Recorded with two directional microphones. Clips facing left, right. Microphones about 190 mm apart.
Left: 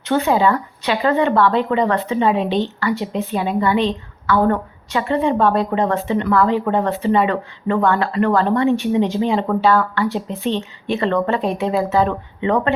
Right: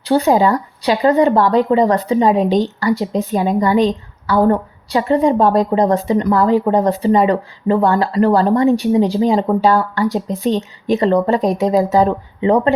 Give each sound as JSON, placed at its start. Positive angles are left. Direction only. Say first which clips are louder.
{"t": 0.0, "sound": "a woman's voice", "louder": "right 3 dB", "side_deg": -35}